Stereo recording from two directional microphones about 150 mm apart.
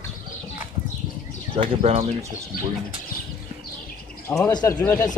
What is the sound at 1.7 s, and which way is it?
Speech, 40° right (ahead or behind).